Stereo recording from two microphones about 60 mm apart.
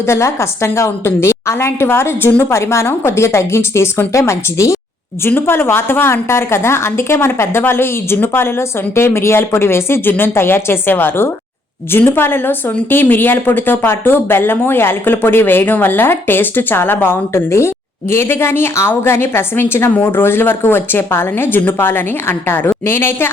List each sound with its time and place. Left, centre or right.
0.1 s a woman's voice: left
5.2 s a woman's voice: left